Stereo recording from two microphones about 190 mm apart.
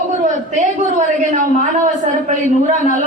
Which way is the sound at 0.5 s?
40° right (ahead or behind).